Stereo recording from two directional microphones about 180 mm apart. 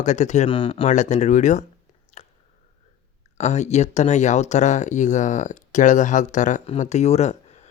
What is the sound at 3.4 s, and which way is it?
Speech, 40° left (ahead or behind).